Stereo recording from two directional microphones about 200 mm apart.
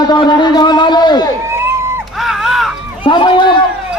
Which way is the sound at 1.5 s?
10° right (ahead or behind).